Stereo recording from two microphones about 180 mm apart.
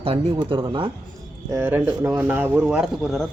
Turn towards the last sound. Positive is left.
turn(degrees=-5)  # may be behind; listen again after turning